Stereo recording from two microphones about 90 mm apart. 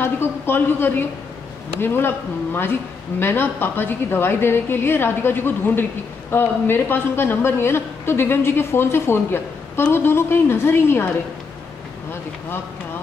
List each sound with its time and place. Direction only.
0.0 s a man's voice: 25° left (ahead or behind)